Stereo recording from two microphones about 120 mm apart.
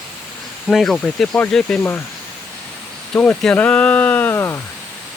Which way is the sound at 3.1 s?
10° left (ahead or behind).